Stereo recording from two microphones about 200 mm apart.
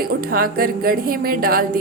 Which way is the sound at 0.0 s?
50° right (ahead or behind).